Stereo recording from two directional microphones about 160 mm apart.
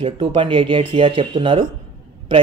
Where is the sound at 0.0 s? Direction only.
35° right (ahead or behind).